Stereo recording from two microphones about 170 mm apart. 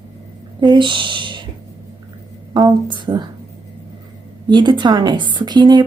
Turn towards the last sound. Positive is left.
turn(degrees=-25)  # may be behind; listen again after turning